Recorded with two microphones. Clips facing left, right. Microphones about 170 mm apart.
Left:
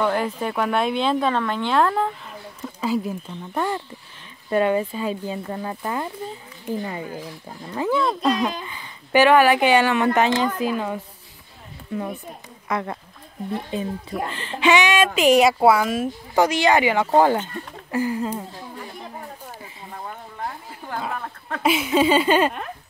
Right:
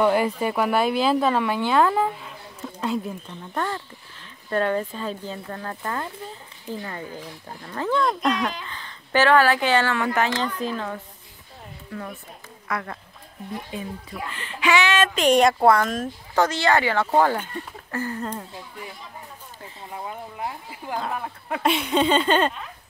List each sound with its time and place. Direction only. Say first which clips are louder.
0.0 s speech: right 2 dB; 10° right (ahead or behind); by 15.0 s 15° left (ahead or behind)
15.1 s speech: left 2 dB; 5° left (ahead or behind)
19.9 s a sound: right 2 dB; 10° right (ahead or behind)
21.1 s speech: right 1 dB; 10° right (ahead or behind)
21.6 s speech: left 2 dB; 5° left (ahead or behind)